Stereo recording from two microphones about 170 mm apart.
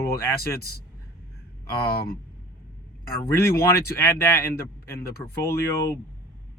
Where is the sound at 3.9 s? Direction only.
15° left (ahead or behind).